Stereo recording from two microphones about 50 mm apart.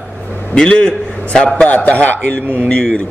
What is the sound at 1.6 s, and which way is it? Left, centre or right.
A man's voice, left.